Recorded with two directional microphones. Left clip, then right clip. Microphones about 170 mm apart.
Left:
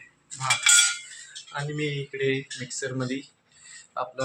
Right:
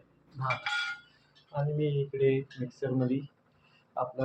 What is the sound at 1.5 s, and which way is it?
Speech, 15° left (ahead or behind).